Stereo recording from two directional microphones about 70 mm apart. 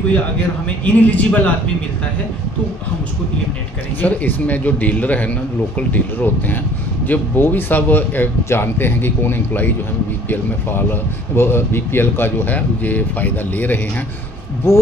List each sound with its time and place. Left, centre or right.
0.8 s speech: left
4.0 s speech: left
14.6 s speech: left